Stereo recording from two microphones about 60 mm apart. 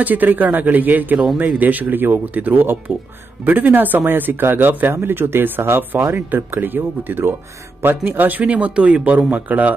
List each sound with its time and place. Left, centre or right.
0.0 s a man's voice: right